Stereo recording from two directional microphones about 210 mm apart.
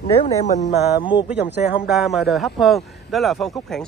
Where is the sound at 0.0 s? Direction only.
30° left (ahead or behind).